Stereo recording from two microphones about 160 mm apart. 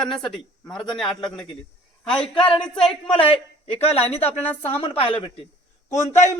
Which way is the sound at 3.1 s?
35° left (ahead or behind).